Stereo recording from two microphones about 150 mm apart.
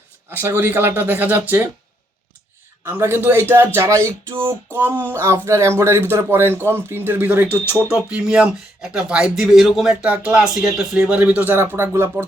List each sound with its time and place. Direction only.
0.3 s speech: 20° right (ahead or behind)
2.8 s speech: 15° right (ahead or behind)